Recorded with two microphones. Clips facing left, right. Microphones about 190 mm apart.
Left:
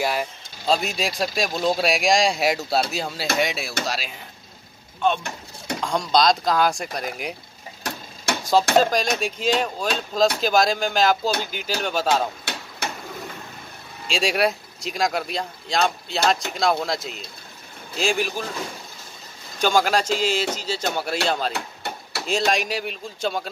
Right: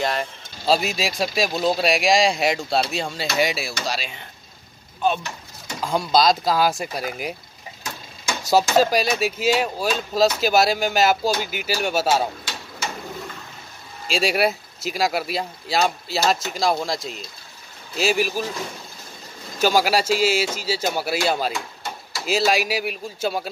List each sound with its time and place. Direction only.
0.0 s speech: 5° left (ahead or behind)
5.8 s speech: 5° right (ahead or behind)
8.7 s speech: 5° right (ahead or behind)
14.0 s speech: centre (ahead or behind)
19.6 s speech: 5° right (ahead or behind)
21.5 s a sound: 65° left (ahead or behind)
22.2 s speech: 5° right (ahead or behind)